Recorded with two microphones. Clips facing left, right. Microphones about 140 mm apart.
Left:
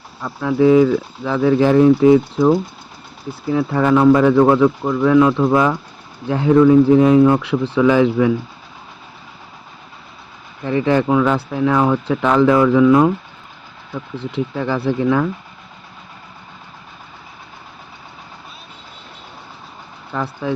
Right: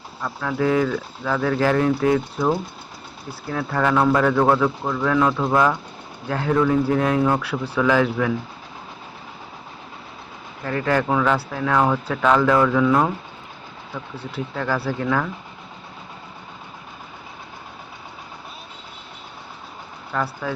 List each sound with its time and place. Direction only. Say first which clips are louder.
0.4 s speech: left 9 dB; 15° left (ahead or behind)
3.5 s speech: left 6 dB; 15° left (ahead or behind)
10.7 s speech: left 5 dB; 15° left (ahead or behind)
14.2 s speech: left 7 dB; 20° left (ahead or behind)